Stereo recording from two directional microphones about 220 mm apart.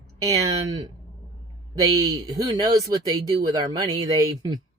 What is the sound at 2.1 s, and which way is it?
Speech, 15° right (ahead or behind).